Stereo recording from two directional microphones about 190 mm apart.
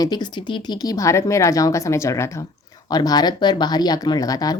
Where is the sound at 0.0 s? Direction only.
20° left (ahead or behind).